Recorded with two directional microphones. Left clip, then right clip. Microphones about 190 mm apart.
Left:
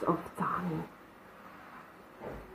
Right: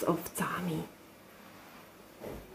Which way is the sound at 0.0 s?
25° right (ahead or behind).